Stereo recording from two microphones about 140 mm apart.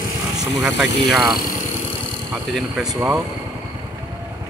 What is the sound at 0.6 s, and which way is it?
Speech, 5° right (ahead or behind).